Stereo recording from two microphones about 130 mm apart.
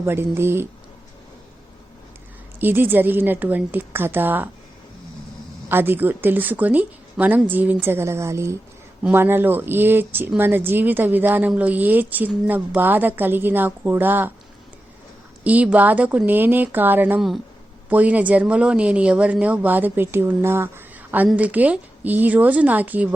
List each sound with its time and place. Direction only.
0.0 s speech: 20° right (ahead or behind)
2.6 s speech: 15° right (ahead or behind)
5.6 s speech: 15° right (ahead or behind)
15.4 s speech: 10° right (ahead or behind)
17.2 s speech: centre (ahead or behind)
17.8 s speech: 10° right (ahead or behind)